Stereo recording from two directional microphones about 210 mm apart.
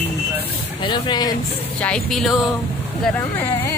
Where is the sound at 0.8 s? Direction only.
20° left (ahead or behind).